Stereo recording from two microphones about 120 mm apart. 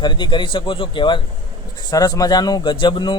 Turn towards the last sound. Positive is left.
turn(degrees=40)  # may be behind; listen again after turning